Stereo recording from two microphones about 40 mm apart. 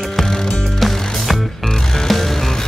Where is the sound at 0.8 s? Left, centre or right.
Centre.